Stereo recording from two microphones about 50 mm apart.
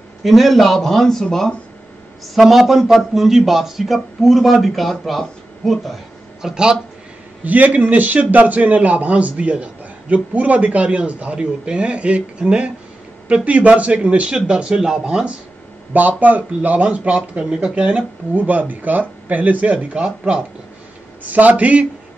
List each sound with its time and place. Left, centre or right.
0.2 s speech: centre
2.3 s a man's voice: centre
6.4 s speech: centre
7.4 s a man's voice: right; by 15.2 s centre
15.9 s a man's voice: right
18.3 s speech: right
20.0 s speech: centre
21.2 s speech: right